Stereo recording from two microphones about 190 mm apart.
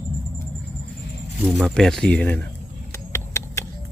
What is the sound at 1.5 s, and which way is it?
Speech, centre (ahead or behind).